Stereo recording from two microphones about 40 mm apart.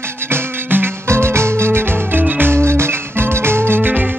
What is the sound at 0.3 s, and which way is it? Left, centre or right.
Music, right.